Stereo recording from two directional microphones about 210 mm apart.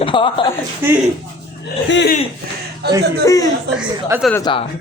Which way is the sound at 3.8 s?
10° right (ahead or behind).